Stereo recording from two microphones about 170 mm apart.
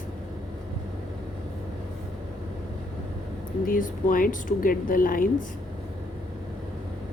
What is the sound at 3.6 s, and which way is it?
Speech, 55° left (ahead or behind).